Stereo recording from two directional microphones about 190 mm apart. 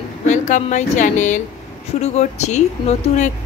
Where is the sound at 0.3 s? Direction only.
40° left (ahead or behind).